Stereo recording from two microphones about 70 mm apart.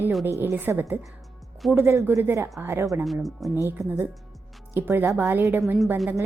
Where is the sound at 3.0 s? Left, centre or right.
Centre.